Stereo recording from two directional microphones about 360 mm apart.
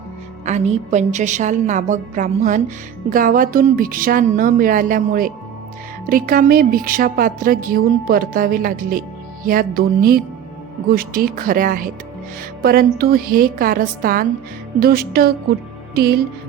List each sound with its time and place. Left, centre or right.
0.4 s speech: centre